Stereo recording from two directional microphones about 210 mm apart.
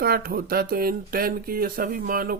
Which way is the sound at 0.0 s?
45° right (ahead or behind).